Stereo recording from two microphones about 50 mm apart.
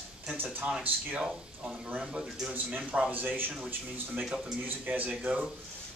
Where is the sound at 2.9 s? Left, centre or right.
Right.